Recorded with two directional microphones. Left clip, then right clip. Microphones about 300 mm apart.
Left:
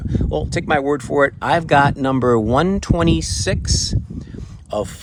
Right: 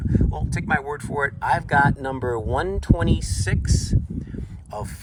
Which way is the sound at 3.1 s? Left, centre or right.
Centre.